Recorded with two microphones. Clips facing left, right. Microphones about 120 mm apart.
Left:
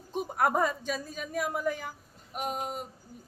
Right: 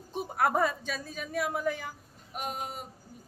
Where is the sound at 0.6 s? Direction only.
10° left (ahead or behind).